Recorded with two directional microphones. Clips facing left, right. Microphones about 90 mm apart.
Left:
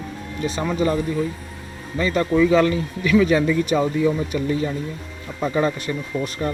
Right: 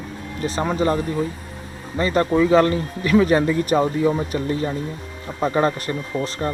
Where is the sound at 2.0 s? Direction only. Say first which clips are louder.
Even; 40° right (ahead or behind).